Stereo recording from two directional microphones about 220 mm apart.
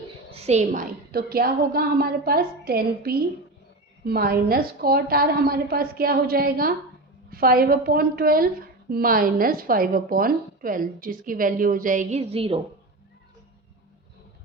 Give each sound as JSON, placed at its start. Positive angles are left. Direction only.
{"t": 0.3, "sound": "a woman's voice", "side_deg": -30}